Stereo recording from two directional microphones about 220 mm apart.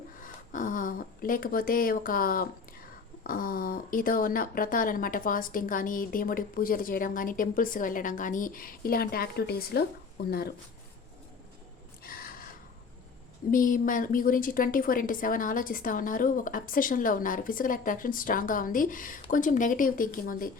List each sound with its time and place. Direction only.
0.2 s a woman's voice: 35° left (ahead or behind)
12.0 s gasp: 40° left (ahead or behind)
13.5 s a woman's voice: 40° left (ahead or behind)